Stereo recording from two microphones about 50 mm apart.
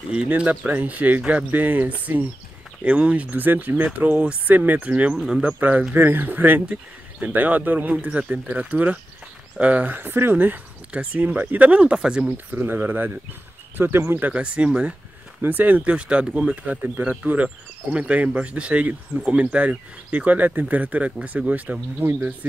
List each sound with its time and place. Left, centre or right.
0.5 s speech: right
5.1 s speech: centre
5.6 s speech: right
9.8 s speech: right
10.3 s speech: right
11.6 s speech: right
12.3 s speech: right
14.3 s speech: right
15.4 s speech: right
22.0 s speech: right